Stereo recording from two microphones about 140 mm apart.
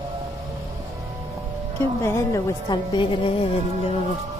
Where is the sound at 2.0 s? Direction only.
20° left (ahead or behind).